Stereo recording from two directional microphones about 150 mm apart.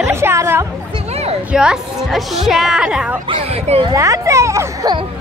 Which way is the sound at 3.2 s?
40° right (ahead or behind).